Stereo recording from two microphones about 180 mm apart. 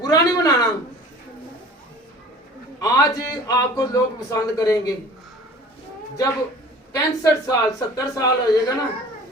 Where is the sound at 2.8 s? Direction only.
20° left (ahead or behind).